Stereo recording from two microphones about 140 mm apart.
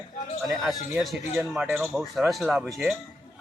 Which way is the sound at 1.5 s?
10° right (ahead or behind).